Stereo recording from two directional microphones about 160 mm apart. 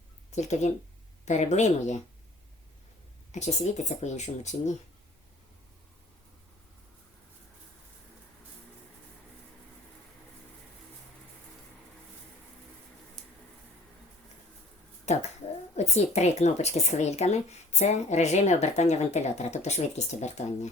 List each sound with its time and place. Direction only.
0.3 s speech: 45° left (ahead or behind)
3.3 s speech: 45° left (ahead or behind)
15.0 s speech: 45° left (ahead or behind)